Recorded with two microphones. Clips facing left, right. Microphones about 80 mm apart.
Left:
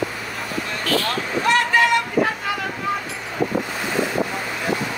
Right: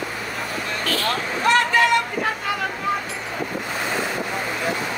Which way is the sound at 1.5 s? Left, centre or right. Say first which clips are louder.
Even; right.